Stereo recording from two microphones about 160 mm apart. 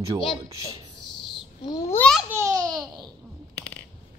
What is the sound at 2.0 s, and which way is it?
Babbling, 5° left (ahead or behind).